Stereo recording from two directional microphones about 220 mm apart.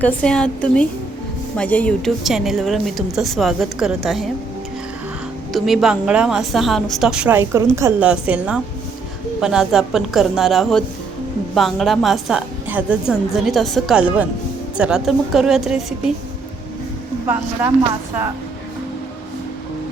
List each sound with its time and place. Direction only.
0.0 s a woman's voice: 5° left (ahead or behind)
5.5 s a woman's voice: centre (ahead or behind)